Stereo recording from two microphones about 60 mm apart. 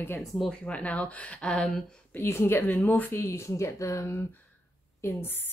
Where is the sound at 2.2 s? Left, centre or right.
Left.